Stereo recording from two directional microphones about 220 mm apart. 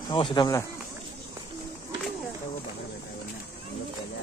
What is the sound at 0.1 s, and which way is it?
Speech, 20° left (ahead or behind).